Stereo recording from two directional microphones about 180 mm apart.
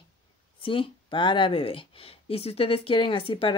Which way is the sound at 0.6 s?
30° left (ahead or behind).